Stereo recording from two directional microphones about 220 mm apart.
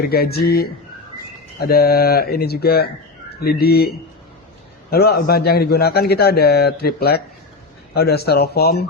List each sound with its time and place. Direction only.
0.0 s a man's voice: 45° left (ahead or behind)